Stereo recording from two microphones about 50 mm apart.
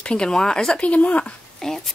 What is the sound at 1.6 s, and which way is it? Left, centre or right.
Speech, centre.